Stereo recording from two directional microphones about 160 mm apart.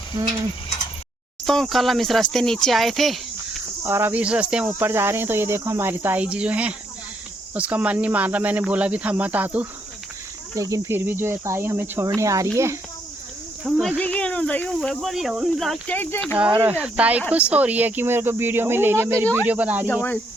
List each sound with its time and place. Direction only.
1.5 s speech: 5° left (ahead or behind)
3.8 s speech: 15° right (ahead or behind)
10.5 s speech: 20° right (ahead or behind)
13.7 s speech: centre (ahead or behind)
16.6 s speech: 10° right (ahead or behind)
19.9 s speech: 15° left (ahead or behind)